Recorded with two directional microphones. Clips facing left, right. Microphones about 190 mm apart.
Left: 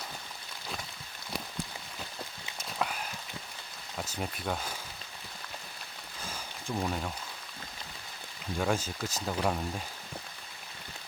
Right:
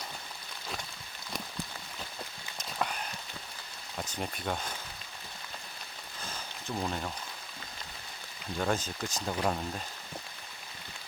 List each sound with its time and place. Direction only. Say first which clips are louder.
2.6 s horse: even; 5° left (ahead or behind)
3.9 s speech: even; 5° left (ahead or behind)
6.2 s a sound: left 1 dB; 10° left (ahead or behind)
8.5 s speech: left 1 dB; 5° left (ahead or behind)